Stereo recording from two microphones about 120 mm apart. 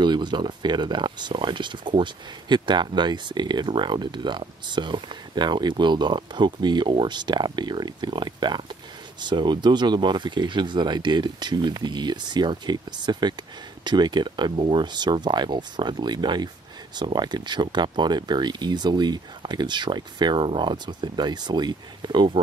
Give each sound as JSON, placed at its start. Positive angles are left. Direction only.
{"t": 0.0, "sound": "speech", "side_deg": -40}